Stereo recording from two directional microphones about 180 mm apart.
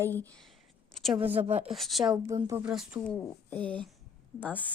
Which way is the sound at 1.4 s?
35° right (ahead or behind).